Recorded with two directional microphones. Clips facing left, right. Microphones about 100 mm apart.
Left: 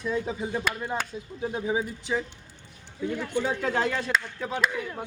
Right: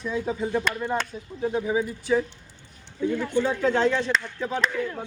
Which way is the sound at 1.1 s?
30° right (ahead or behind).